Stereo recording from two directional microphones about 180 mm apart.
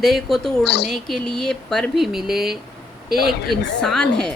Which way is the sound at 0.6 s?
70° left (ahead or behind).